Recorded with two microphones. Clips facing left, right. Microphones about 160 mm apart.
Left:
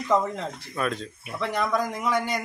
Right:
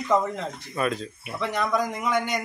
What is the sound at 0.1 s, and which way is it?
Speech, centre (ahead or behind).